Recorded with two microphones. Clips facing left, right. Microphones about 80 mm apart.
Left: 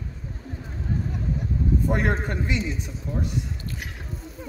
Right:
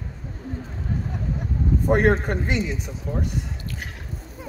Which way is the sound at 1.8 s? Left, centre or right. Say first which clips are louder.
Right 10 dB; right.